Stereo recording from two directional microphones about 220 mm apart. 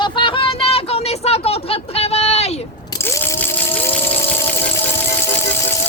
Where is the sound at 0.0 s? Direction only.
20° left (ahead or behind).